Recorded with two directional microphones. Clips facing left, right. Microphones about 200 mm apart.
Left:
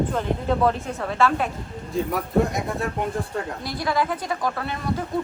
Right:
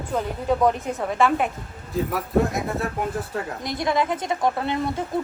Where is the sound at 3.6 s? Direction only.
20° right (ahead or behind).